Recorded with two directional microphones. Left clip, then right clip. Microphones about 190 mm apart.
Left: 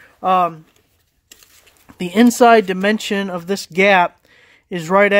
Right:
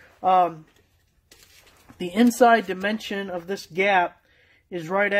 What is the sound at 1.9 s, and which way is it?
Speech, 45° left (ahead or behind).